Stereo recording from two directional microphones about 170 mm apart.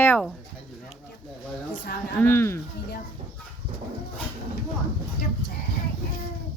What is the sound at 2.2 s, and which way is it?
Speech, 15° left (ahead or behind).